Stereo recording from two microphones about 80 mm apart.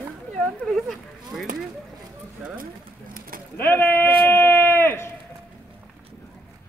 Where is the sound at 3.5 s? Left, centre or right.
Left.